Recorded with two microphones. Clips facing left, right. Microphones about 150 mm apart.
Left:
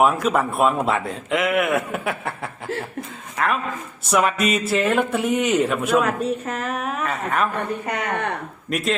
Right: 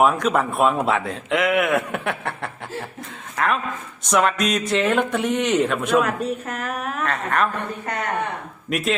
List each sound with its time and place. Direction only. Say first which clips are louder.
0.0 s speech: even; centre (ahead or behind)
8.7 s speech: even; centre (ahead or behind)